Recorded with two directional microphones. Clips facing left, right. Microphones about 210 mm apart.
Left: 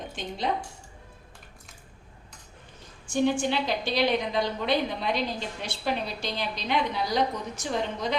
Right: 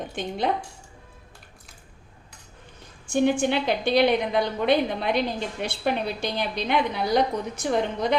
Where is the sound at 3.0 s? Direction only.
55° right (ahead or behind).